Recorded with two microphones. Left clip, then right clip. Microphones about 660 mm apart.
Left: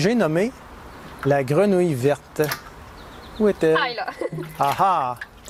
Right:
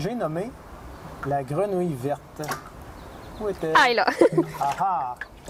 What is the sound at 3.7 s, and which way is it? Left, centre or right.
Speech, right.